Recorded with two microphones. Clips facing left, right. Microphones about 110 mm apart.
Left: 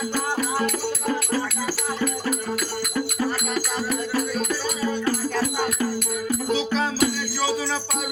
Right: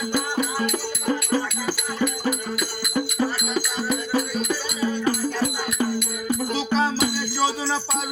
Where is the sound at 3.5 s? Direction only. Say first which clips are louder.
Right 1 dB; 15° right (ahead or behind).